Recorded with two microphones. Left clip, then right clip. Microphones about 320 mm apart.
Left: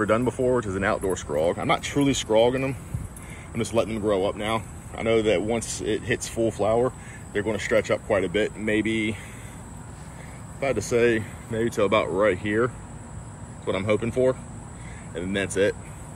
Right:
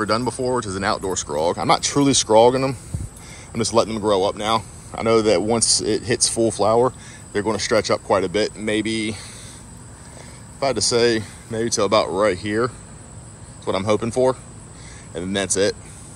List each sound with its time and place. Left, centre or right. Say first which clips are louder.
0.0 s speech: right 1 dB; centre
5.9 s speech: right 6 dB; right
6.4 s speech: right 5 dB; right
10.6 s speech: right 4 dB; centre